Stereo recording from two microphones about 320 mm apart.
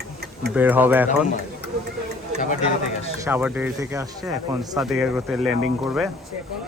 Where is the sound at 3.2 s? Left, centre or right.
Centre.